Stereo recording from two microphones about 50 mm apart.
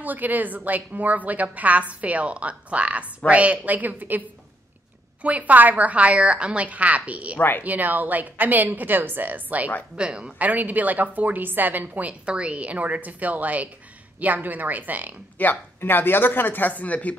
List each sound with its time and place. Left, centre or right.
0.0 s a woman's voice: right
5.2 s a woman's voice: right
7.3 s speech: left
7.6 s a woman's voice: right
9.9 s a woman's voice: centre
10.4 s a woman's voice: right
15.3 s a man's voice: left